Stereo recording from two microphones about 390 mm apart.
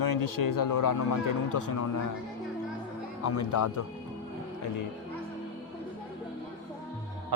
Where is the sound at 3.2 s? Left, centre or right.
Left.